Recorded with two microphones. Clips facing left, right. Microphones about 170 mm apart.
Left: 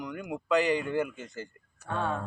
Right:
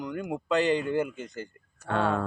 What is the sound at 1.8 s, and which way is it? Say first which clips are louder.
Speech: right 5 dB; 90° right.